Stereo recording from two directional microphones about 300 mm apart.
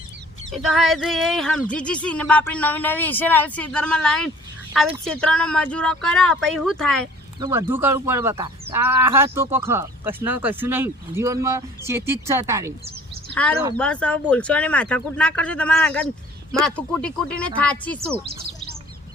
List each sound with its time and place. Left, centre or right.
0.5 s speech: centre
7.3 s speech: centre
13.3 s speech: centre